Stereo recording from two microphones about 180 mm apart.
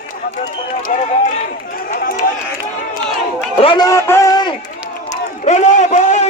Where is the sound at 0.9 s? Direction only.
45° left (ahead or behind).